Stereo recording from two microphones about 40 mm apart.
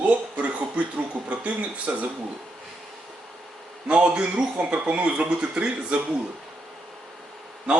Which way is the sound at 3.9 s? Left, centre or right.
Right.